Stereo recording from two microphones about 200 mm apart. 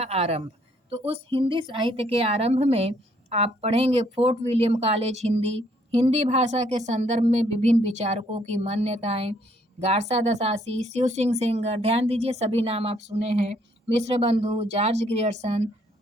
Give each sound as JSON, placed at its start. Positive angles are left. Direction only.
{"t": 0.0, "sound": "a woman's voice", "side_deg": -30}